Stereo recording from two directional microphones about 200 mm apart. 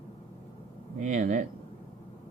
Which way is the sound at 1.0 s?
40° right (ahead or behind).